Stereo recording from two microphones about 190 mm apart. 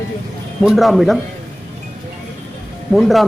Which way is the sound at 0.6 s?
Centre (ahead or behind).